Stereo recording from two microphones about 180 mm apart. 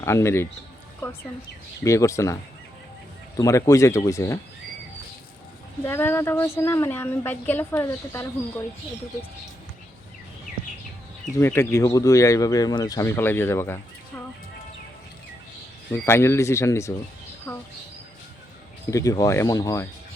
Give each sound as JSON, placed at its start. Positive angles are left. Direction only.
{"t": 0.0, "sound": "speech", "side_deg": 15}
{"t": 1.8, "sound": "speech", "side_deg": 15}
{"t": 5.8, "sound": "speech", "side_deg": 10}
{"t": 11.3, "sound": "speech", "side_deg": 15}
{"t": 15.9, "sound": "speech", "side_deg": 15}
{"t": 17.5, "sound": "a sound", "side_deg": 20}
{"t": 18.9, "sound": "speech", "side_deg": 20}